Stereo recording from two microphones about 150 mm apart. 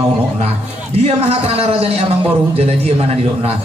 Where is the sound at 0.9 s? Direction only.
45° right (ahead or behind).